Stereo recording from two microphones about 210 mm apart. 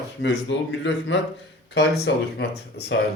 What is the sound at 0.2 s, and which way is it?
A man's voice, 55° left (ahead or behind).